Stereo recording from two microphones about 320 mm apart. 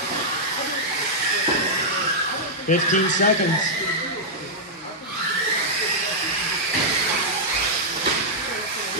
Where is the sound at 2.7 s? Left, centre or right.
Left.